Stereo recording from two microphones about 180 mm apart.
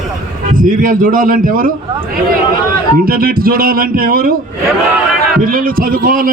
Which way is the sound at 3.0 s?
55° right (ahead or behind).